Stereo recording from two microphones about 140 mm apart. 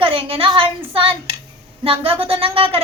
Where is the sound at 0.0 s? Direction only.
40° right (ahead or behind).